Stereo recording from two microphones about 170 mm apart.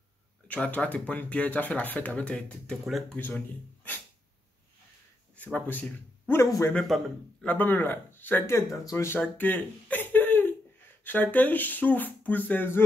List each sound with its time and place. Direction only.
0.5 s speech: 10° left (ahead or behind)
5.3 s speech: 10° left (ahead or behind)
6.4 s a man's voice: 20° left (ahead or behind)
6.7 s speech: 5° left (ahead or behind)